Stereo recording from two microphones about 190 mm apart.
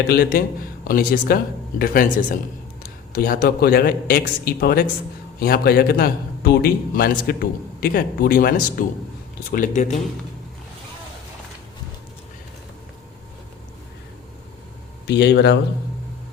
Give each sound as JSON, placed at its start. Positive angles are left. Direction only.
{"t": 0.1, "sound": "a man's voice", "side_deg": 55}
{"t": 15.0, "sound": "speech", "side_deg": 65}